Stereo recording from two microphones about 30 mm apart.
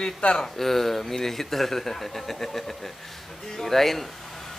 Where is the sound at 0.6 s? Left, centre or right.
Centre.